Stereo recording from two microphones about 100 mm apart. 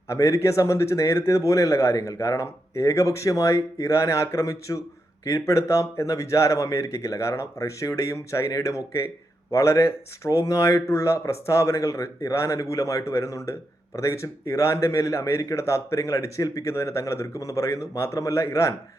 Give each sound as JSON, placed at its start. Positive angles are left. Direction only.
{"t": 0.1, "sound": "speech", "side_deg": 30}